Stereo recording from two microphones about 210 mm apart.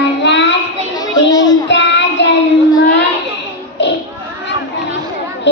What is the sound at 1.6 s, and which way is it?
Child singing, 55° left (ahead or behind).